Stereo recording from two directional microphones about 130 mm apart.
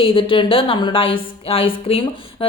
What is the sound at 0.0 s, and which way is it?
Speech, 45° left (ahead or behind).